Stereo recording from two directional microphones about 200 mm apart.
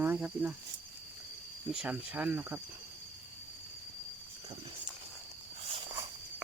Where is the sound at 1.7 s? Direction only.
5° right (ahead or behind).